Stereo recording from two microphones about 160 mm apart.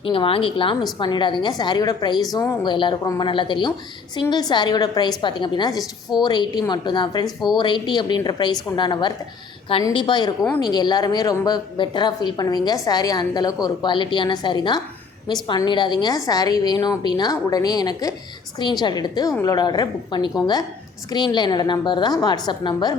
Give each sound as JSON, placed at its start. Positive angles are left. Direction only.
{"t": 0.0, "sound": "a woman's voice", "side_deg": 35}
{"t": 2.6, "sound": "a woman's voice", "side_deg": 30}